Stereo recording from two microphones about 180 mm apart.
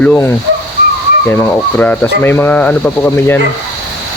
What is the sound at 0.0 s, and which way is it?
Speech, 5° left (ahead or behind).